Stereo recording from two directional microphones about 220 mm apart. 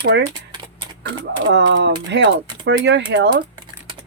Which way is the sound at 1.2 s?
55° right (ahead or behind).